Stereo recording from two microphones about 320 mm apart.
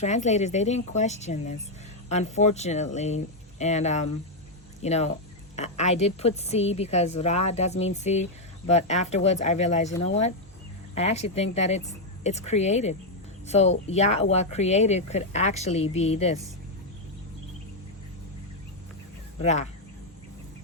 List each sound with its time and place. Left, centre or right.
0.0 s a woman's voice: left
10.9 s a woman's voice: centre
19.4 s a woman's voice: left